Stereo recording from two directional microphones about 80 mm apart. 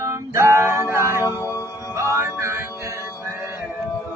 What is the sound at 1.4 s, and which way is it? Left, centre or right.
Music, left.